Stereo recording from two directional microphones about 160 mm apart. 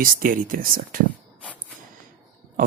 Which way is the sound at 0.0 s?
60° right (ahead or behind).